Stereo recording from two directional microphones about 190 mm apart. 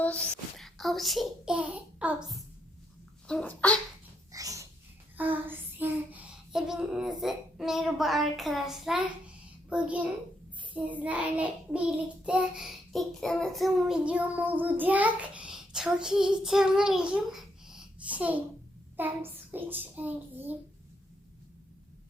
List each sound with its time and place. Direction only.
0.0 s a child's voice: 5° left (ahead or behind)
4.3 s a sound: 20° right (ahead or behind)
5.1 s child singing: 10° right (ahead or behind)
9.6 s a child's voice: 5° right (ahead or behind)
10.8 s child singing: 10° right (ahead or behind)
18.9 s a child's voice: 10° right (ahead or behind)